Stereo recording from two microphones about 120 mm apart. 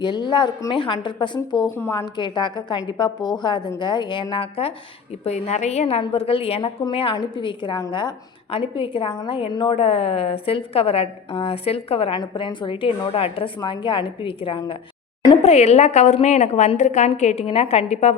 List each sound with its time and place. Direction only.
0.0 s a woman's voice: 40° left (ahead or behind)
1.7 s a woman's voice: 20° left (ahead or behind)
2.1 s a woman's voice: 40° left (ahead or behind)
5.2 s a woman's voice: 65° left (ahead or behind)
6.0 s a woman's voice: 50° left (ahead or behind)
9.7 s a woman's voice: 55° left (ahead or behind)
12.2 s a woman's voice: 40° left (ahead or behind)
15.4 s a woman's voice: 60° left (ahead or behind); by 17.1 s 90° left
17.1 s a woman's voice: 65° left (ahead or behind)